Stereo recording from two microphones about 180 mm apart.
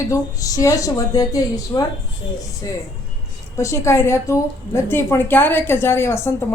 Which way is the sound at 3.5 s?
15° left (ahead or behind).